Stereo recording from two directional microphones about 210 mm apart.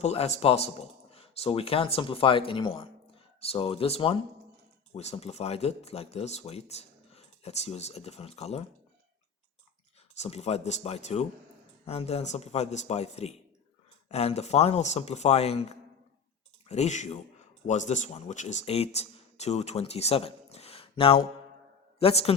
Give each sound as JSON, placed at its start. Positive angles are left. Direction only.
{"t": 0.0, "sound": "speech", "side_deg": 30}
{"t": 10.2, "sound": "a man's voice", "side_deg": 30}